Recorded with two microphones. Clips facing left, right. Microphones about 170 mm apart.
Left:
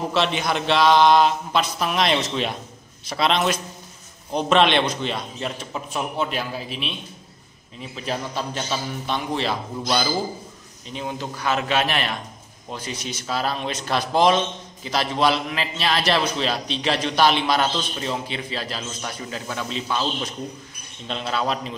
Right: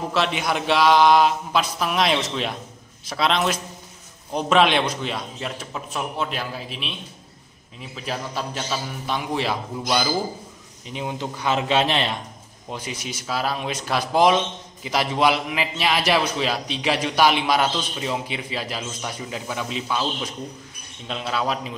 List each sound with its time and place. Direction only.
0.1 s a man's voice: 5° right (ahead or behind)
7.9 s a man's voice: 5° right (ahead or behind); by 12.2 s 25° right (ahead or behind)
12.7 s a man's voice: 10° right (ahead or behind)